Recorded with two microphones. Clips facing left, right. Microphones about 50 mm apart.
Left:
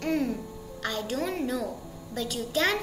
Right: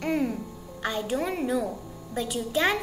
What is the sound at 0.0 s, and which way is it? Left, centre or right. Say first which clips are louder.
A child's voice: right 1 dB; centre.